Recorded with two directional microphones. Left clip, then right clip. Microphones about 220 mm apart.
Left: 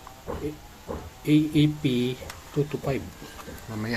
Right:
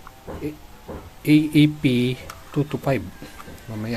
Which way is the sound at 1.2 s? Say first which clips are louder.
Right 5 dB; 35° right (ahead or behind).